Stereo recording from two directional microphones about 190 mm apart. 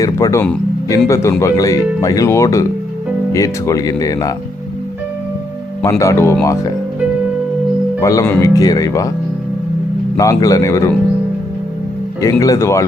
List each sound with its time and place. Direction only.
0.0 s speech: 15° left (ahead or behind)
5.8 s speech: 15° left (ahead or behind)
8.0 s speech: 15° left (ahead or behind)
10.2 s speech: 20° left (ahead or behind)
12.2 s speech: 15° left (ahead or behind)